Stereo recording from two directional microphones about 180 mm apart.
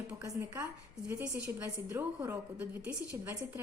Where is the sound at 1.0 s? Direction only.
5° right (ahead or behind).